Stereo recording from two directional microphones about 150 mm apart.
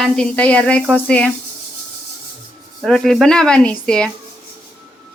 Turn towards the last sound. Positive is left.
turn(degrees=5)  # may be behind; listen again after turning